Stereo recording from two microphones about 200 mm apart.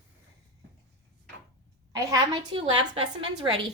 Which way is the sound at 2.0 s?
20° right (ahead or behind).